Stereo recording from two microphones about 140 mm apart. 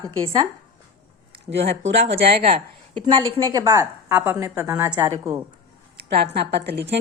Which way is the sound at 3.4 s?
25° right (ahead or behind).